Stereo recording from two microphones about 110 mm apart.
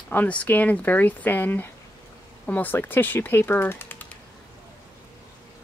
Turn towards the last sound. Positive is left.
turn(degrees=15)  # may be behind; listen again after turning